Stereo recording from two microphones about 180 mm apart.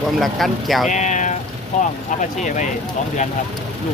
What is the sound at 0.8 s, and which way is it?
Speech, 40° left (ahead or behind).